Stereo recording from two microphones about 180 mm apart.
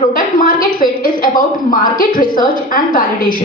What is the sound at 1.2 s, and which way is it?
A woman's voice, 50° left (ahead or behind).